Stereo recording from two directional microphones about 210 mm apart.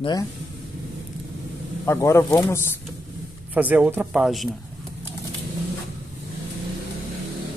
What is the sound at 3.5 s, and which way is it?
Speech, 5° right (ahead or behind).